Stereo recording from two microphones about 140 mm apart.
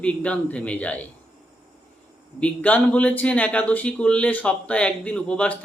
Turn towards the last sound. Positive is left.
turn(degrees=10)  # may be behind; listen again after turning